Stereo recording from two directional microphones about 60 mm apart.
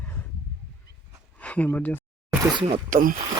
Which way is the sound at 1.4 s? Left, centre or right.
Left.